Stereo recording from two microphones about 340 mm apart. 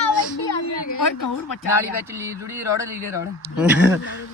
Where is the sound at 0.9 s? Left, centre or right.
Left.